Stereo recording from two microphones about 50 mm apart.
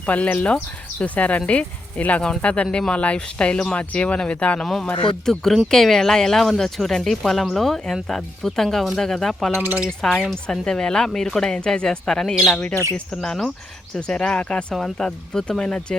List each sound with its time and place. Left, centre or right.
0.0 s speech: left
4.6 s speech: centre